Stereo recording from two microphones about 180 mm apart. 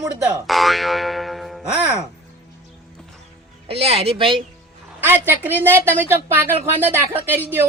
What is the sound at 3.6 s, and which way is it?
Speech, 35° right (ahead or behind).